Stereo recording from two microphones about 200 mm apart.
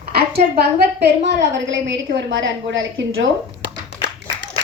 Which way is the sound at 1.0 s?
60° right (ahead or behind).